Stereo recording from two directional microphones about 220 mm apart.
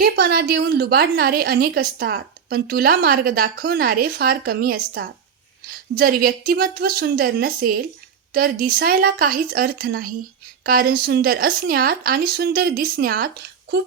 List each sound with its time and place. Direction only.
0.0 s a woman's voice: 45° right (ahead or behind)